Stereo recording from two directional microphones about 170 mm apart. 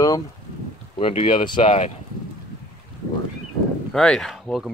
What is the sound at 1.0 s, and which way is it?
Speech, 35° left (ahead or behind).